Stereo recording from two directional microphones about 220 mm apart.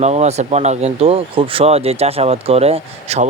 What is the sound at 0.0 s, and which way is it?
Speech, 30° right (ahead or behind).